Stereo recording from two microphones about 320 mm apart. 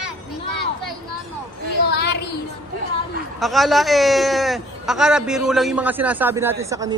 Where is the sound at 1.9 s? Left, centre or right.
Left.